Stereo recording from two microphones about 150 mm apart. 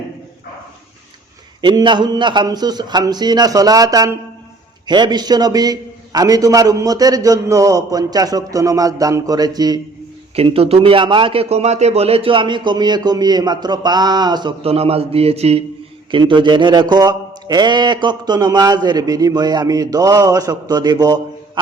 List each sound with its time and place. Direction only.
1.6 s a man's voice: 30° right (ahead or behind)
10.3 s a man's voice: 40° right (ahead or behind)
14.6 s a man's voice: 40° right (ahead or behind)
16.1 s a man's voice: 30° right (ahead or behind)